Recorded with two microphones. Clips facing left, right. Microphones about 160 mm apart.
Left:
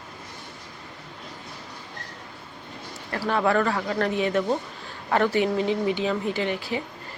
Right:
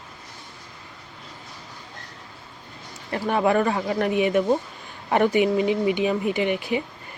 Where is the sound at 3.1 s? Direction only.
20° right (ahead or behind).